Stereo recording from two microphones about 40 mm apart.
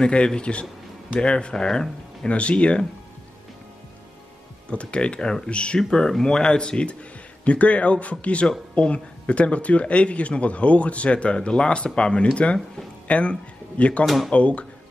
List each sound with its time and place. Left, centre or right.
0.0 s speech: left
1.5 s speech: centre
2.3 s speech: left
4.6 s speech: left
5.8 s speech: centre
7.4 s a man's voice: left
14.0 s speech: centre
14.3 s a man's voice: left